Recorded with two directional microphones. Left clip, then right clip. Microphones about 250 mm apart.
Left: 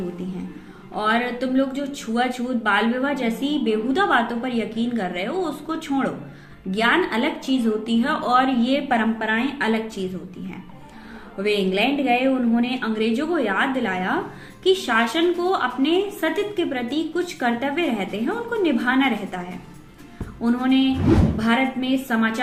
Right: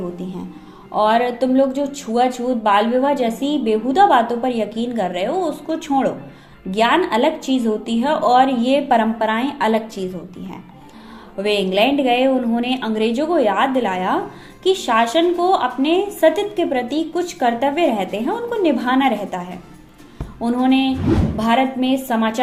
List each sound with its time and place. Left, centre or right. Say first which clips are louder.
0.9 s speech: right 6 dB; centre
11.4 s a woman's voice: right 4 dB; right
20.4 s a woman's voice: right 3 dB; centre
21.0 s a woman's voice: even; centre
21.3 s a woman's voice: right 4 dB; centre